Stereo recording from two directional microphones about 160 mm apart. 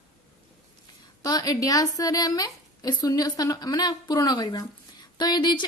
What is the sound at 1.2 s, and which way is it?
A woman's voice, 25° left (ahead or behind).